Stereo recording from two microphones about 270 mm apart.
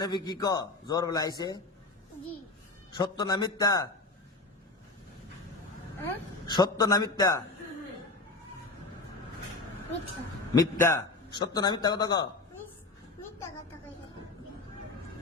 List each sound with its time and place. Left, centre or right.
0.0 s a man's voice: centre
2.9 s a man's voice: centre
6.0 s a man's voice: centre
10.5 s a man's voice: centre